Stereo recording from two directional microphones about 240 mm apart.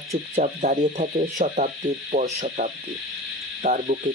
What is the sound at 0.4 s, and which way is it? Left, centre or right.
Speech, right.